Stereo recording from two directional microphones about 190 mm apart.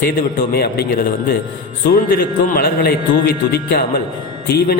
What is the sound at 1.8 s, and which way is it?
A man's voice, 50° left (ahead or behind).